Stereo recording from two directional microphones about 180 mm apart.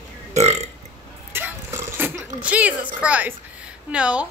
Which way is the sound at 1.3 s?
10° right (ahead or behind).